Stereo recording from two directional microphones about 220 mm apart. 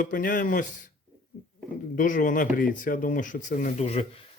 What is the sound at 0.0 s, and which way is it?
Speech, 40° left (ahead or behind).